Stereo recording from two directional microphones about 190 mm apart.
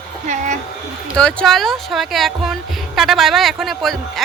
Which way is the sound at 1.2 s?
5° left (ahead or behind).